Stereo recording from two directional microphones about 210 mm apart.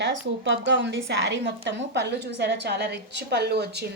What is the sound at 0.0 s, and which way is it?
A woman's voice, 55° right (ahead or behind).